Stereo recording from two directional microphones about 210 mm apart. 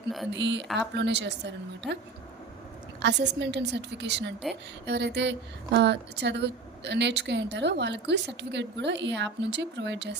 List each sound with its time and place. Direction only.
0.3 s a woman's voice: 60° right (ahead or behind)
3.0 s a woman's voice: 55° right (ahead or behind)